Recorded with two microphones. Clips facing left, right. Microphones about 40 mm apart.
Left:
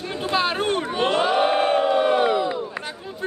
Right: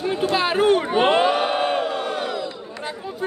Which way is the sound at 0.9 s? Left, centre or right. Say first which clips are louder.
Right 1 dB; right.